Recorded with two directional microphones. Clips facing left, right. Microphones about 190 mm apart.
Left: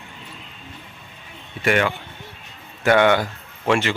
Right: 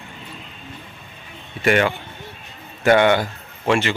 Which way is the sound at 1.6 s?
35° right (ahead or behind).